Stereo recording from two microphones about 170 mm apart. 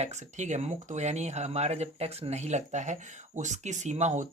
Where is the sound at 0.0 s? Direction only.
45° right (ahead or behind).